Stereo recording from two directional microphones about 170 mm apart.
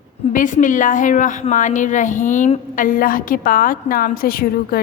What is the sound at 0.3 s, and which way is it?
A woman's voice, 50° left (ahead or behind).